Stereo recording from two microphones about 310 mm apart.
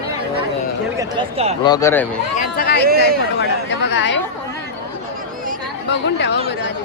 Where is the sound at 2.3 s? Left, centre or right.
Left.